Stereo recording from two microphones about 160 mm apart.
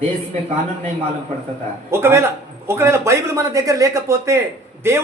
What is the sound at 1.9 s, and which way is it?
Speech, 15° right (ahead or behind).